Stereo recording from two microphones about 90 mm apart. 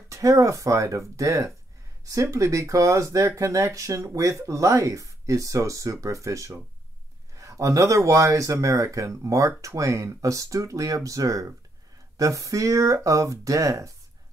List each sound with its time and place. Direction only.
0.1 s speech: 35° right (ahead or behind)